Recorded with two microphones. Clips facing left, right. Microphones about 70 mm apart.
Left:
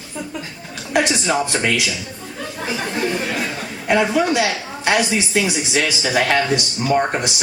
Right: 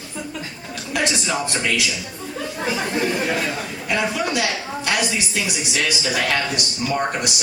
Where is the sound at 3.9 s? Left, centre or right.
Left.